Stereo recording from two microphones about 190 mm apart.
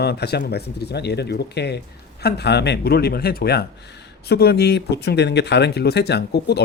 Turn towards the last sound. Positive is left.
turn(degrees=60)  # may be behind; listen again after turning